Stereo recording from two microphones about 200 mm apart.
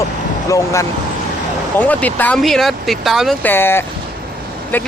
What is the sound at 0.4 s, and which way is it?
Speech, 15° left (ahead or behind).